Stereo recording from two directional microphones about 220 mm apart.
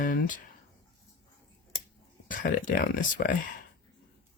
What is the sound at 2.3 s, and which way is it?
Speech, 40° left (ahead or behind).